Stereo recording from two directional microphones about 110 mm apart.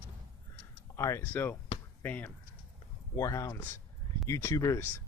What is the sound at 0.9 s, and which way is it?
Speech, 25° left (ahead or behind).